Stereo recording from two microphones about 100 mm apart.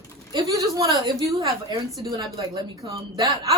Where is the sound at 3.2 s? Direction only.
35° right (ahead or behind).